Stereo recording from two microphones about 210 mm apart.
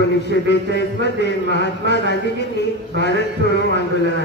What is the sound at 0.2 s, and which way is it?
A man's voice, 55° left (ahead or behind).